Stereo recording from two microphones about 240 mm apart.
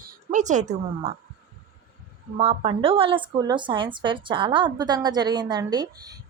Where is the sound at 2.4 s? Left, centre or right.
Right.